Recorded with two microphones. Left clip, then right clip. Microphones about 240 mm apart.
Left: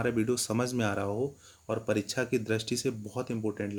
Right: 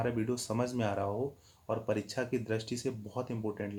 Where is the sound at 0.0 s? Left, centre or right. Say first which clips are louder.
Left 4 dB; left.